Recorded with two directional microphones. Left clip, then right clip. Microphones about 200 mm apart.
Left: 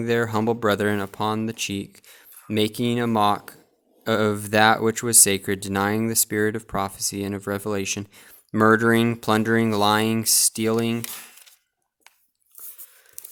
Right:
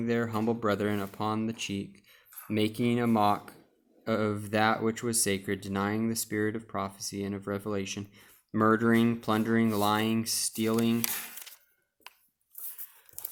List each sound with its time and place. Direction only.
0.0 s speech: 50° left (ahead or behind)